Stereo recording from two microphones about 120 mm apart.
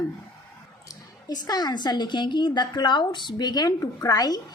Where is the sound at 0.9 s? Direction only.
35° left (ahead or behind).